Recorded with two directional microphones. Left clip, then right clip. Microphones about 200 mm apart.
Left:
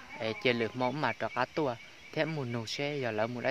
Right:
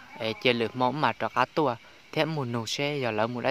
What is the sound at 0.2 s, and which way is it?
Speech, 20° right (ahead or behind).